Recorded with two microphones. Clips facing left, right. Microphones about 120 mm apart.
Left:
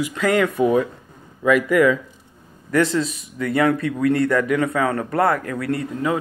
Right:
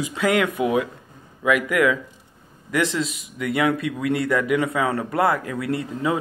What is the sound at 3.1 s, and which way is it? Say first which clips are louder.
Speech: left 3 dB; 20° right (ahead or behind).